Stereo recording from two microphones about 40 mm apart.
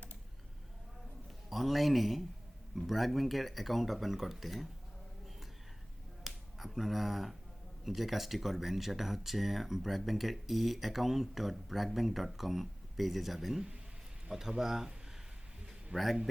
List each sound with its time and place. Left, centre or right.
1.5 s speech: centre
6.2 s finger snapping: centre
7.9 s speech: centre
15.9 s a man's voice: right